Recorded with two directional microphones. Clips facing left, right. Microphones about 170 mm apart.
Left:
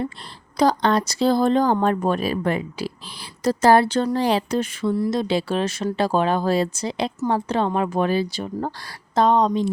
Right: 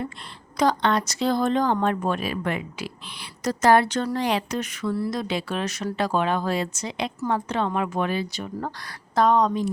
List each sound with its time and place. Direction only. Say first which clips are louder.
0.5 s speech: left 3 dB; 35° left (ahead or behind)
4.9 s speech: left 5 dB; 15° left (ahead or behind)
5.3 s speech: left 5 dB; 30° left (ahead or behind)